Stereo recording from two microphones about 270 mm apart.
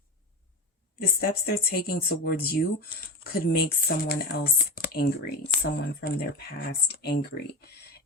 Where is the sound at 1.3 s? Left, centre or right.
Left.